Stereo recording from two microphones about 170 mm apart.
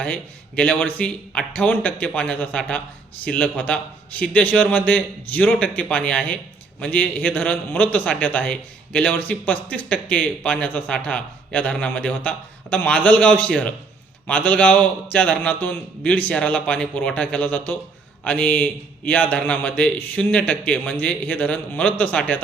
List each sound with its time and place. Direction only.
0.0 s a man's voice: 10° left (ahead or behind)